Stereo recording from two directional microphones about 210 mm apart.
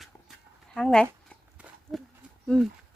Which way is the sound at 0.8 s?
Centre (ahead or behind).